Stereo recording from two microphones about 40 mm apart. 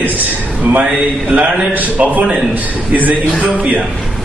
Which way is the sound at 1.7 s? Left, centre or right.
Right.